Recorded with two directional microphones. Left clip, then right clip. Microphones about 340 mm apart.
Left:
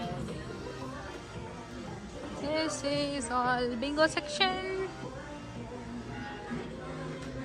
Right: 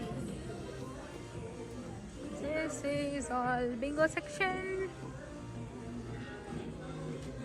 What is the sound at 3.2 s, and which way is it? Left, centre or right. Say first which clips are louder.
Music: left 4 dB; centre.